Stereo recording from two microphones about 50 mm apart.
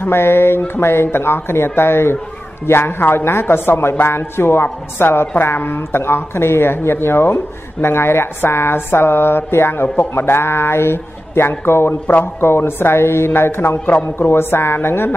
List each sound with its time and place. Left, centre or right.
0.0 s a woman's voice: left